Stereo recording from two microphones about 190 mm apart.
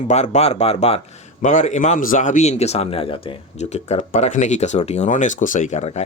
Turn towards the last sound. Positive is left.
turn(degrees=35)  # may be behind; listen again after turning